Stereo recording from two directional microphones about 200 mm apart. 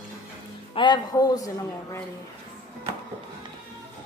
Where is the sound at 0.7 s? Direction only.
20° left (ahead or behind).